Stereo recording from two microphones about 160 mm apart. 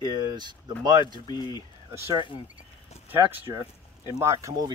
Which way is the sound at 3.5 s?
25° right (ahead or behind).